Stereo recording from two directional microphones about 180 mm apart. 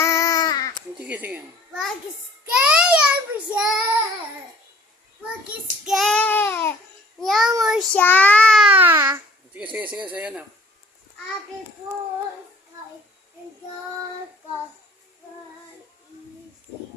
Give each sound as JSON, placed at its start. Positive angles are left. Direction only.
{"t": 0.0, "sound": "a sound", "side_deg": 15}
{"t": 0.9, "sound": "a child's voice", "side_deg": -10}
{"t": 2.5, "sound": "child singing", "side_deg": -5}
{"t": 5.8, "sound": "child singing", "side_deg": 0}
{"t": 7.2, "sound": "child singing", "side_deg": 0}
{"t": 8.0, "sound": "a child's voice", "side_deg": 10}